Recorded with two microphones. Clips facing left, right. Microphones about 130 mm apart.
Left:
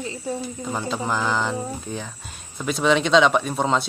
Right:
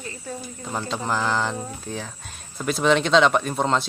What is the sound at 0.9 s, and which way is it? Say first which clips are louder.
A man's voice: even; centre (ahead or behind).